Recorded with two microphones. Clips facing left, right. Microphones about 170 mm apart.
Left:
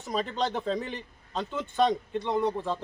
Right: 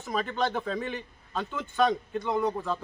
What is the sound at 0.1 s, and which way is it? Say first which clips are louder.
Speech: even; 25° left (ahead or behind).